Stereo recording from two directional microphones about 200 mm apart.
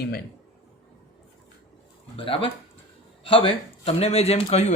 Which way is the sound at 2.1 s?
25° left (ahead or behind).